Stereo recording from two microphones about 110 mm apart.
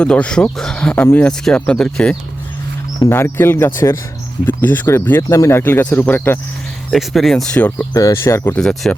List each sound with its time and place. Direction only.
0.0 s speech: 10° left (ahead or behind)
3.1 s speech: 20° left (ahead or behind)
6.9 s speech: centre (ahead or behind)
7.9 s speech: 25° left (ahead or behind)
8.5 s speech: 5° left (ahead or behind)